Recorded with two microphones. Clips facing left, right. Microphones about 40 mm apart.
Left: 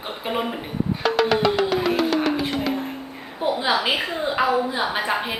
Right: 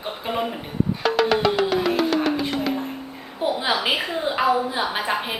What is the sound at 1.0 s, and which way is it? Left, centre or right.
Music, centre.